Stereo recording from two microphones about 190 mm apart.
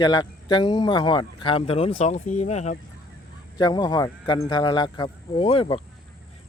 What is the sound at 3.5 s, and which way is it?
Speech, 20° left (ahead or behind).